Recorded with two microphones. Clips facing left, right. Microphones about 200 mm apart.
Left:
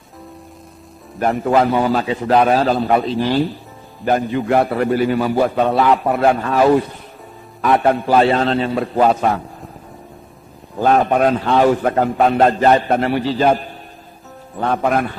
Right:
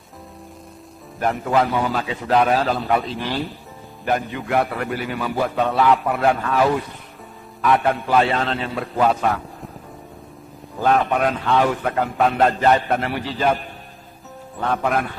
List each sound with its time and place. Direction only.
1.3 s a man's voice: 40° left (ahead or behind)
10.8 s a man's voice: 35° left (ahead or behind)
14.6 s a man's voice: 35° left (ahead or behind)